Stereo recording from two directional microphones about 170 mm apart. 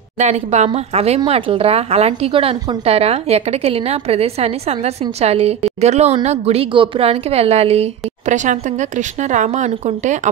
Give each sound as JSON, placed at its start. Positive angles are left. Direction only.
{"t": 0.2, "sound": "speech", "side_deg": -40}